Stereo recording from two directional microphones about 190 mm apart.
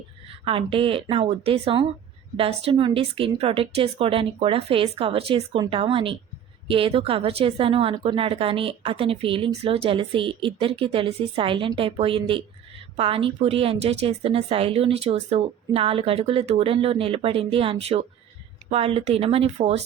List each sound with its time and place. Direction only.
0.4 s a woman's voice: 30° right (ahead or behind)